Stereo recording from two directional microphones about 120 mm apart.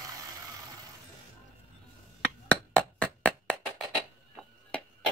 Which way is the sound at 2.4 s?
10° left (ahead or behind).